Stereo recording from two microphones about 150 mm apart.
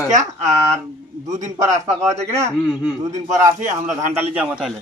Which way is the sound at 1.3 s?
55° right (ahead or behind).